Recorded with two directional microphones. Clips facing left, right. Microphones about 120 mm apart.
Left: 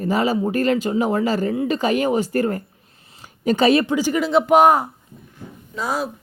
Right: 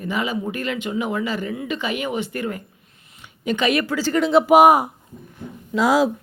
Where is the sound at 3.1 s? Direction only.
40° left (ahead or behind).